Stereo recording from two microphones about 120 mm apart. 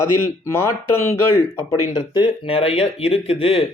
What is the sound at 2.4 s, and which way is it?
Speech, 50° left (ahead or behind).